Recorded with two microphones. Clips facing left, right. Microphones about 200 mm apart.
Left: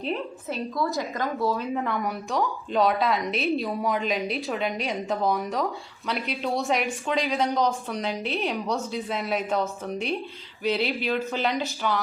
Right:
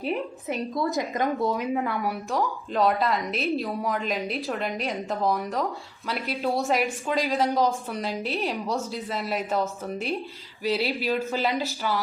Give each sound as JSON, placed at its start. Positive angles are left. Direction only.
{"t": 0.0, "sound": "a woman's voice", "side_deg": -15}
{"t": 1.7, "sound": "a woman's voice", "side_deg": -5}